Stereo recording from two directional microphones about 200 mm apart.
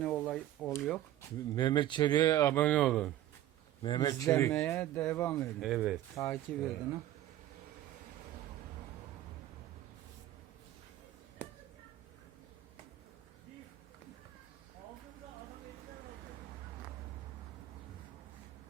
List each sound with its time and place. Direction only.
0.0 s a sound: 5° left (ahead or behind)
1.5 s speech: 20° left (ahead or behind); by 3.1 s 5° left (ahead or behind)
3.8 s speech: 20° left (ahead or behind); by 6.0 s 5° right (ahead or behind)
6.1 s speech: 10° left (ahead or behind)